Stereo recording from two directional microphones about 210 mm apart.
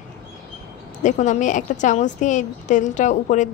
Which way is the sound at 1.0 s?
35° left (ahead or behind).